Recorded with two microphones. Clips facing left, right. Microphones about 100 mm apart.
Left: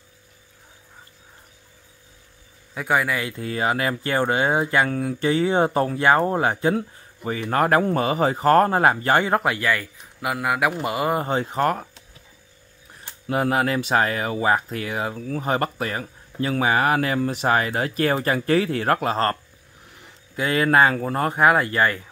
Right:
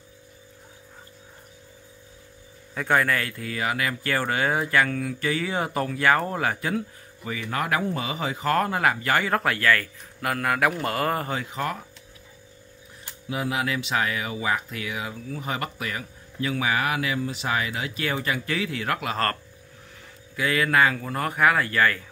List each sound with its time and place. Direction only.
2.7 s speech: 10° left (ahead or behind)
11.2 s speech: 35° left (ahead or behind)
13.3 s speech: 45° left (ahead or behind)
20.3 s speech: 30° left (ahead or behind)